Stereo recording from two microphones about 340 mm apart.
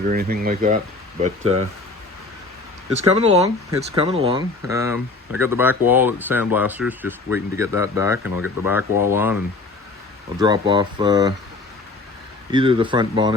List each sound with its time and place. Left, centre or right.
0.0 s speech: right
3.1 s speech: centre
12.5 s speech: centre